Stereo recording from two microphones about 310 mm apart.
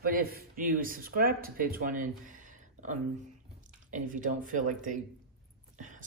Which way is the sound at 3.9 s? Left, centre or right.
Right.